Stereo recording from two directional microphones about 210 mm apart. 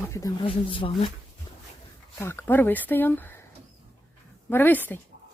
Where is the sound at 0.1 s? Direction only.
15° left (ahead or behind).